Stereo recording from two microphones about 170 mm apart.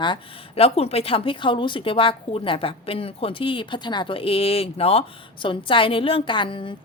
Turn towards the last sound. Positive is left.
turn(degrees=30)  # may be behind; listen again after turning